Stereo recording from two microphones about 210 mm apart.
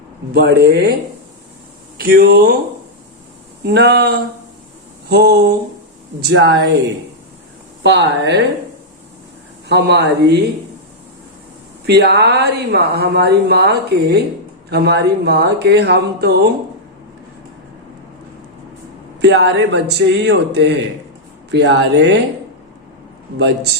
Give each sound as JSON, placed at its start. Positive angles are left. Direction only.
{"t": 0.3, "sound": "a woman's voice", "side_deg": -50}
{"t": 2.0, "sound": "a woman's voice", "side_deg": -45}
{"t": 3.7, "sound": "a woman's voice", "side_deg": -50}
{"t": 7.9, "sound": "speech", "side_deg": -55}
{"t": 9.6, "sound": "speech", "side_deg": -55}
{"t": 11.9, "sound": "a woman's voice", "side_deg": -55}
{"t": 19.2, "sound": "speech", "side_deg": -60}